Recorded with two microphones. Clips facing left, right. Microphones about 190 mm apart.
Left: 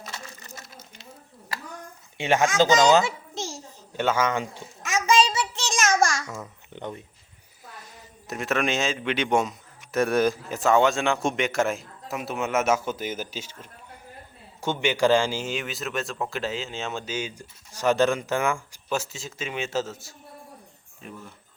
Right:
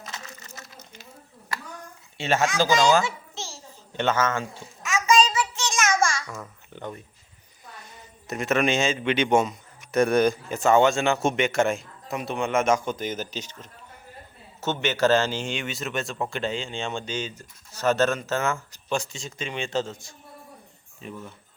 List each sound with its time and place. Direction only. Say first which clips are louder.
2.1 s speech: left 2 dB; 15° left (ahead or behind)
3.3 s a sound: left 5 dB; 45° left (ahead or behind)
3.9 s a man's voice: even; 10° left (ahead or behind)
4.9 s child singing: right 1 dB; 30° left (ahead or behind)
6.7 s speech: left 1 dB; 20° left (ahead or behind)
7.8 s a man's voice: even; centre (ahead or behind)